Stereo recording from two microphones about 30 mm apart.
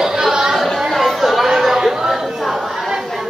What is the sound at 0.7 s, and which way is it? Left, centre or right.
Chatter, centre.